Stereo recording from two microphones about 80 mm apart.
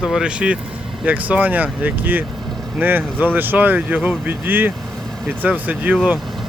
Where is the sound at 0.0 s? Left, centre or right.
Centre.